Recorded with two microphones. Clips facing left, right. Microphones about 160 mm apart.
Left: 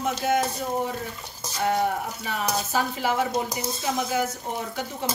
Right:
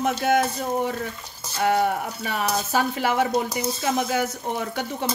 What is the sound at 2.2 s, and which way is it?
Speech, 70° right (ahead or behind).